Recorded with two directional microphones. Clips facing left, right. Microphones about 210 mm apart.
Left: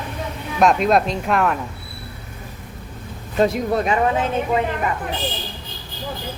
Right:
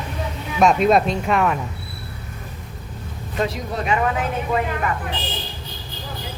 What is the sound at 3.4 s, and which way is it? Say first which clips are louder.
Speech: left 6 dB; 40° left (ahead or behind).